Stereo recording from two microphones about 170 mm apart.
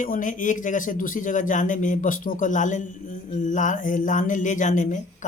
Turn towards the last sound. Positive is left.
turn(degrees=45)  # may be behind; listen again after turning